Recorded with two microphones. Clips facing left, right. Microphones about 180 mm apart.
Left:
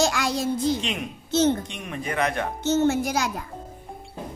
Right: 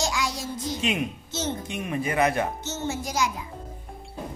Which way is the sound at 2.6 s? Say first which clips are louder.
Left 10 dB; 65° left (ahead or behind).